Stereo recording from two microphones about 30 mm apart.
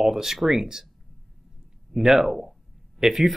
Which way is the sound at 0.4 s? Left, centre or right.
Centre.